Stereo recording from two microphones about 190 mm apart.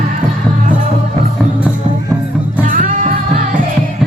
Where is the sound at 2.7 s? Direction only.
45° right (ahead or behind).